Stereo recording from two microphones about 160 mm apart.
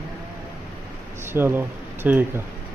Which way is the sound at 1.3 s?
15° right (ahead or behind).